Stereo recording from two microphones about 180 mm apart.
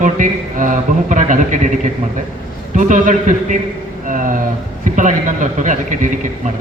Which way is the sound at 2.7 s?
45° right (ahead or behind).